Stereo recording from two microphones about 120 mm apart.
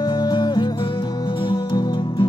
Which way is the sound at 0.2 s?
40° left (ahead or behind).